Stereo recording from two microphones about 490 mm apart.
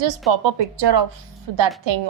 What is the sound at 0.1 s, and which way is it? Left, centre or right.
Speech, right.